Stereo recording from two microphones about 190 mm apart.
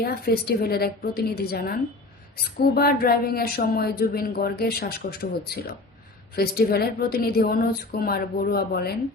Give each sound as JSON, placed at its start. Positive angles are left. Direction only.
{"t": 0.0, "sound": "a woman's voice", "side_deg": 55}